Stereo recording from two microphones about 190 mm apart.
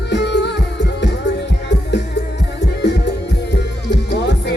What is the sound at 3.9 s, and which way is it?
Music, 65° left (ahead or behind).